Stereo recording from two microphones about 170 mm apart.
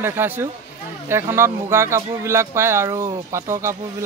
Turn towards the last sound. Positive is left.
turn(degrees=-15)  # may be behind; listen again after turning